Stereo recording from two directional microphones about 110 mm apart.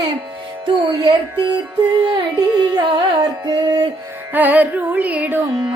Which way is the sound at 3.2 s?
40° right (ahead or behind).